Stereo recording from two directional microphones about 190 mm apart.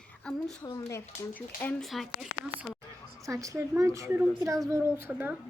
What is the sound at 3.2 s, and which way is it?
A woman's voice, 15° right (ahead or behind).